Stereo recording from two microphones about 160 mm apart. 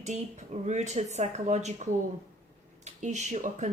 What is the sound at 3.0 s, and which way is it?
Speech, 45° right (ahead or behind).